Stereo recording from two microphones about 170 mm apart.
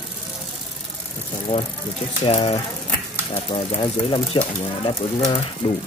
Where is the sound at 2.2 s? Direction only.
35° left (ahead or behind).